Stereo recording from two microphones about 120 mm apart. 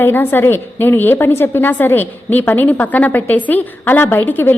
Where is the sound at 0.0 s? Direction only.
15° left (ahead or behind).